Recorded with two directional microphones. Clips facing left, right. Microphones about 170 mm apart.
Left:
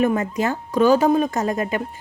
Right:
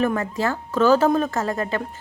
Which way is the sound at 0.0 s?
20° left (ahead or behind).